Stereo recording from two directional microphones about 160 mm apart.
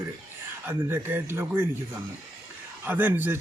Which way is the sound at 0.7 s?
15° right (ahead or behind).